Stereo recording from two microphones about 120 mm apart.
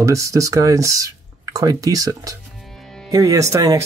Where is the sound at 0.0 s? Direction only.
25° right (ahead or behind).